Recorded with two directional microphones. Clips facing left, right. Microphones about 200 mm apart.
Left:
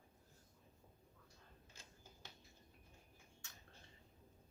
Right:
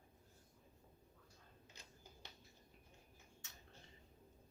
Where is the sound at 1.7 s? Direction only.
20° right (ahead or behind).